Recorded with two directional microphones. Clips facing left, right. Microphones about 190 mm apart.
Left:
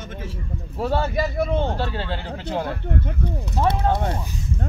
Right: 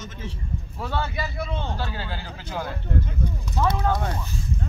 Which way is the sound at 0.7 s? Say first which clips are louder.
Left 7 dB; 40° left (ahead or behind).